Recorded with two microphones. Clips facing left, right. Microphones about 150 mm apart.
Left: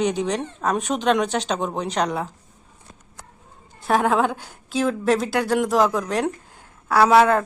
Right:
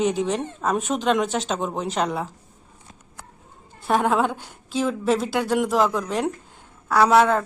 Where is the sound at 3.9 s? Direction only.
Centre (ahead or behind).